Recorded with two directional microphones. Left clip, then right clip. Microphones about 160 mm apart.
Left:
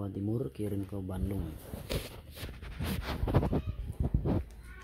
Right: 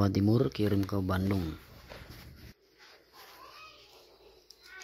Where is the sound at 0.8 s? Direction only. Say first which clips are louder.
Right 7 dB; 25° right (ahead or behind).